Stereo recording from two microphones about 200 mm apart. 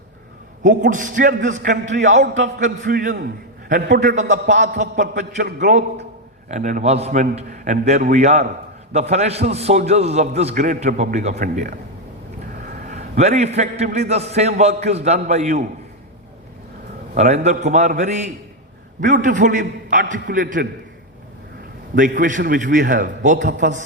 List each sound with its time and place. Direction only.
0.6 s a man's voice: 40° right (ahead or behind)
4.1 s a man's voice: 35° right (ahead or behind)
5.5 s a man's voice: 35° right (ahead or behind)
12.8 s a man's voice: 40° right (ahead or behind)
17.2 s a man's voice: 35° right (ahead or behind)
21.9 s a man's voice: 40° right (ahead or behind)
23.5 s a man's voice: 60° right (ahead or behind)